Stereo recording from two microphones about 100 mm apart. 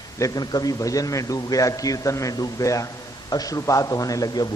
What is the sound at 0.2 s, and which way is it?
A man's voice, 40° left (ahead or behind).